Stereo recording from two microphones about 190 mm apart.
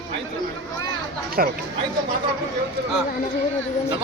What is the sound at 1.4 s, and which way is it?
Speech, 50° right (ahead or behind).